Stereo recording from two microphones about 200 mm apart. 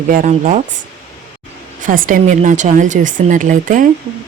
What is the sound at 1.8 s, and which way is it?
Speech, 45° right (ahead or behind).